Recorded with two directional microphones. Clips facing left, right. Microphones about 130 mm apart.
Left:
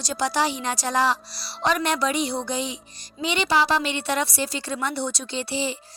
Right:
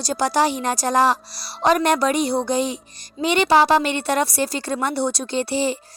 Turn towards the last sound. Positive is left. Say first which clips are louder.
# right 6 dB
turn(degrees=-50)  # may be behind; listen again after turning